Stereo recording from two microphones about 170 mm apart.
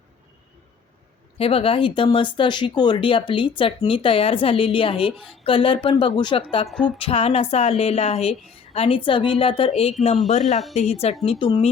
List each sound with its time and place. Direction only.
1.4 s speech: 35° left (ahead or behind)
6.7 s music: 5° left (ahead or behind)
7.0 s speech: 35° left (ahead or behind)